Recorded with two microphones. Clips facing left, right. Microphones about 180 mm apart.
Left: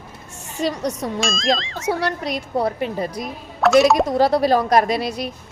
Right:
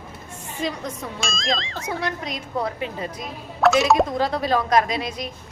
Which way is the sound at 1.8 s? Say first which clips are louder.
Left 5 dB; 75° left (ahead or behind).